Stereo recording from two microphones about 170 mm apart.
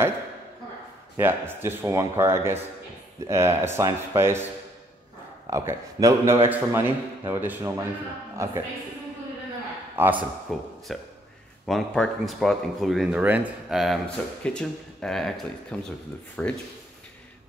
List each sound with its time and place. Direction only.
1.1 s a man's voice: 15° right (ahead or behind)
5.5 s a man's voice: 20° right (ahead or behind)
9.9 s speech: 10° right (ahead or behind)
10.5 s speech: centre (ahead or behind)